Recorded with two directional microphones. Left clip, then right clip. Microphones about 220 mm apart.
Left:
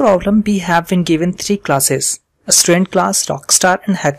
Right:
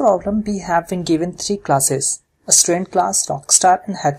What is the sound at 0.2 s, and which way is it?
Speech, 30° left (ahead or behind).